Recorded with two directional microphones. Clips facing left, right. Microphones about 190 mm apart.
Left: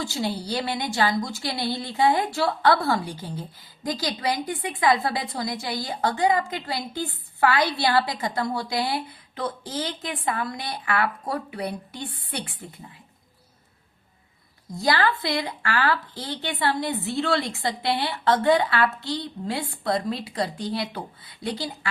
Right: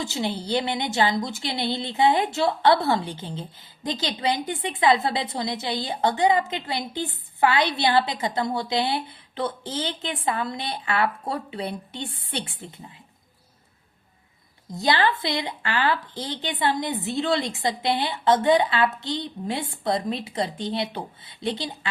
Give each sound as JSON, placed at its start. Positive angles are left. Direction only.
{"t": 0.0, "sound": "a woman's voice", "side_deg": -20}
{"t": 14.8, "sound": "a woman's voice", "side_deg": -20}